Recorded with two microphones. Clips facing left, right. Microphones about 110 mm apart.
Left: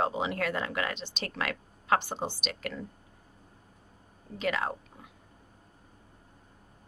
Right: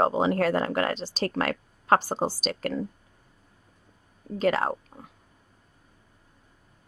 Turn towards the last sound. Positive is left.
turn(degrees=-40)  # may be behind; listen again after turning